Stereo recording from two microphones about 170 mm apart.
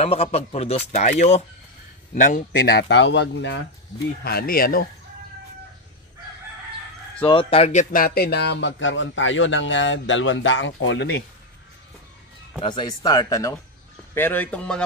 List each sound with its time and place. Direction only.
0.0 s a man's voice: 35° left (ahead or behind); by 3.5 s 90° left
4.2 s speech: 65° left (ahead or behind)
7.2 s speech: 30° left (ahead or behind)
7.9 s a man's voice: 60° left (ahead or behind); by 11.2 s 85° left
12.5 s a man's voice: 25° left (ahead or behind); by 14.8 s 10° left (ahead or behind)